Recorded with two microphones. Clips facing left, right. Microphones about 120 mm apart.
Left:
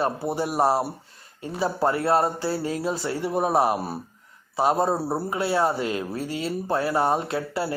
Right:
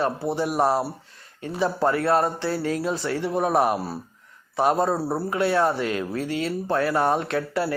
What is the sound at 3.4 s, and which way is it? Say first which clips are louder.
Music: even; 30° left (ahead or behind).